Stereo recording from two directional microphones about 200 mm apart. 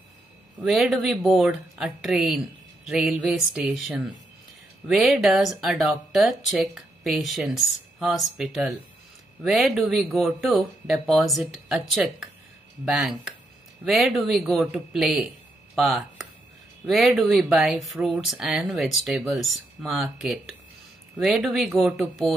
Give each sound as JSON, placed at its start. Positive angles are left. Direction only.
{"t": 0.6, "sound": "speech", "side_deg": 0}